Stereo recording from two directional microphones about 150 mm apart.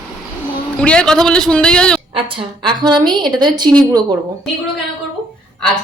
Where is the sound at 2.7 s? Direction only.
30° right (ahead or behind).